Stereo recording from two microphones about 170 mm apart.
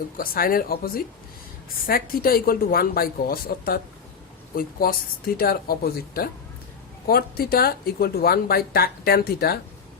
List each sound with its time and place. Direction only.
0.2 s speech: 60° left (ahead or behind)